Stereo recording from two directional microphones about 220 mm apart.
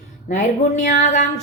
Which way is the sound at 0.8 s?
35° left (ahead or behind).